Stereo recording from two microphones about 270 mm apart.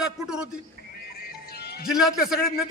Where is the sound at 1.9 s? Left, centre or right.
Centre.